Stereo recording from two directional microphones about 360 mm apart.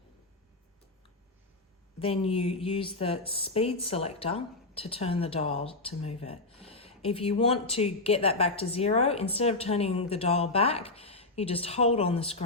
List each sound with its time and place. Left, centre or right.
2.0 s speech: centre